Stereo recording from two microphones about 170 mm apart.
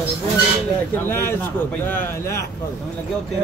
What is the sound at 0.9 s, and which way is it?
Speech, 15° left (ahead or behind).